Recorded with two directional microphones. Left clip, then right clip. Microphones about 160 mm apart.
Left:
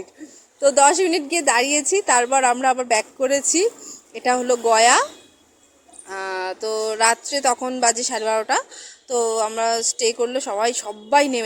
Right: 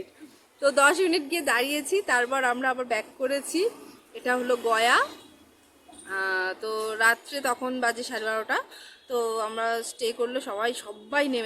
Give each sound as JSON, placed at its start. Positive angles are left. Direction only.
{"t": 0.6, "sound": "a woman's voice", "side_deg": 25}
{"t": 6.1, "sound": "a woman's voice", "side_deg": 30}